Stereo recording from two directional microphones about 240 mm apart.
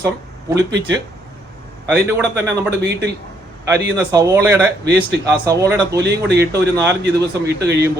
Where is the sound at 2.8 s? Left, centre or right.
Right.